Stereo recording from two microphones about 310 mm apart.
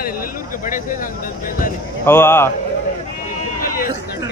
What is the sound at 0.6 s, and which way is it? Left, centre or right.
Speech, left.